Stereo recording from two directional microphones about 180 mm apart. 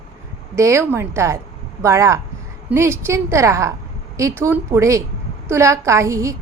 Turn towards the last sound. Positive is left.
turn(degrees=-15)  # may be behind; listen again after turning